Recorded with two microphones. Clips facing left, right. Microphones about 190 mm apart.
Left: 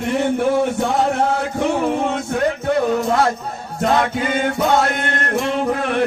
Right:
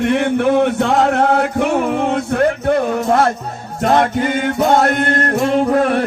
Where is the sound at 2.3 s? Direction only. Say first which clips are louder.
Right 3 dB; 55° right (ahead or behind).